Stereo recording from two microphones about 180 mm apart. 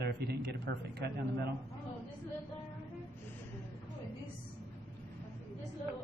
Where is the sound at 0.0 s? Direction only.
65° right (ahead or behind).